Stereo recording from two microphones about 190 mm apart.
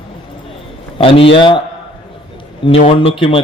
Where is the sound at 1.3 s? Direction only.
25° left (ahead or behind).